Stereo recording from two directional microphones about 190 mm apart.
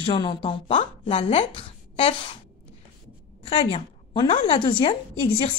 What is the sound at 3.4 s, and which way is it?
A woman's voice, 30° left (ahead or behind).